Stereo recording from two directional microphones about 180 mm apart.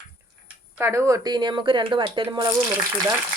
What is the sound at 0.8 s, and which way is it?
Speech, 15° right (ahead or behind).